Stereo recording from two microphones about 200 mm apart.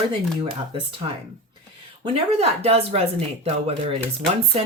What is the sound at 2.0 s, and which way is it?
Speech, 30° right (ahead or behind).